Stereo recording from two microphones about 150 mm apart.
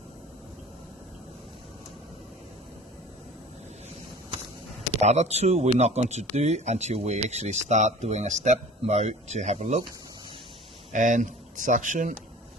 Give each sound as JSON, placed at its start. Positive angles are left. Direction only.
{"t": 5.0, "sound": "speech", "side_deg": -50}
{"t": 10.9, "sound": "speech", "side_deg": -55}